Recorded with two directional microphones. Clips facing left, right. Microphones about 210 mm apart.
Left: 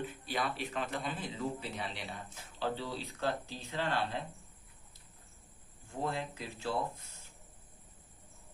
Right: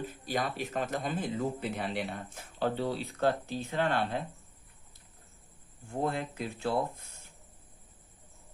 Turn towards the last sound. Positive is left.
turn(degrees=-55)  # may be behind; listen again after turning